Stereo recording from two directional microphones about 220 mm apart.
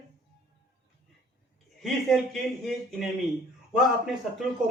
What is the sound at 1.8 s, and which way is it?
A man's voice, centre (ahead or behind).